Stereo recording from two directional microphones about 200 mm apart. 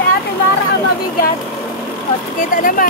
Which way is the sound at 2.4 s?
40° left (ahead or behind).